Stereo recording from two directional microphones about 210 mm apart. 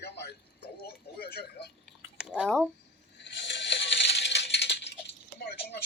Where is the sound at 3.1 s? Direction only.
55° left (ahead or behind).